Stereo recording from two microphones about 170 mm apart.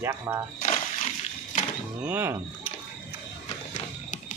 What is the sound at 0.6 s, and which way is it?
Splash, 40° left (ahead or behind).